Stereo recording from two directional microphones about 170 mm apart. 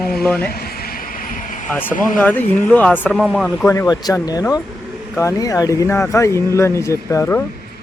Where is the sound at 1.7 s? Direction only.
10° left (ahead or behind).